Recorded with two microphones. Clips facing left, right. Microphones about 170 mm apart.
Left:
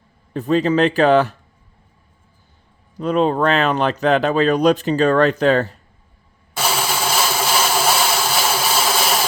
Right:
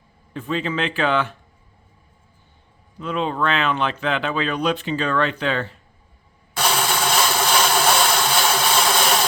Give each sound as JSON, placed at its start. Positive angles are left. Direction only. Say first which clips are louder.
{"t": 0.3, "sound": "speech", "louder": "left 8 dB", "side_deg": 40}
{"t": 3.0, "sound": "speech", "louder": "left 7 dB", "side_deg": 40}
{"t": 6.6, "sound": "a sound", "louder": "even", "side_deg": 5}